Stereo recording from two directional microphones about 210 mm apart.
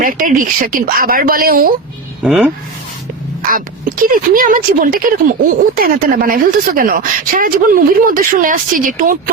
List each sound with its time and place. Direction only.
0.0 s speech: 40° right (ahead or behind)
2.2 s speech: 5° right (ahead or behind)
3.5 s speech: 40° right (ahead or behind)